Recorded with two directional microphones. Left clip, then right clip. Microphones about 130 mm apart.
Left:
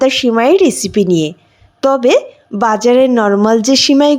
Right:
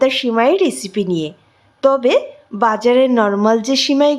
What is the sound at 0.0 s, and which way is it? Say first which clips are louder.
A woman's voice: left 3 dB; 40° left (ahead or behind).